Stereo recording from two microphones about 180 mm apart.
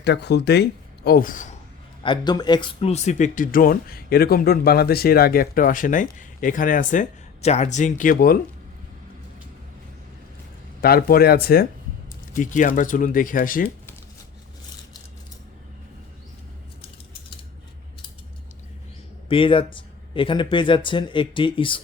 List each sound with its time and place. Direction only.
0.0 s speech: 70° left (ahead or behind); by 1.5 s 45° left (ahead or behind)
2.0 s speech: 25° left (ahead or behind); by 8.4 s 55° left (ahead or behind)
10.8 s speech: 55° left (ahead or behind)
12.3 s speech: 45° left (ahead or behind)
19.3 s speech: 30° left (ahead or behind)